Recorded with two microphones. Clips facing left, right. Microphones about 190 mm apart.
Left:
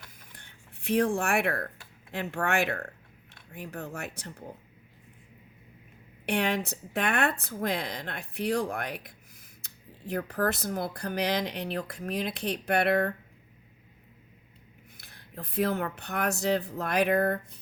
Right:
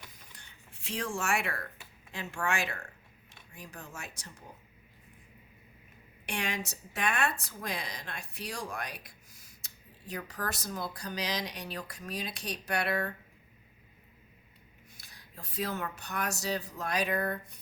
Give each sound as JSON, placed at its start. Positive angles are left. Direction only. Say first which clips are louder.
{"t": 0.3, "sound": "a woman's voice", "louder": "left 3 dB", "side_deg": 55}
{"t": 6.2, "sound": "a woman's voice", "louder": "left 8 dB", "side_deg": 60}
{"t": 14.9, "sound": "a woman's voice", "louder": "left 8 dB", "side_deg": 60}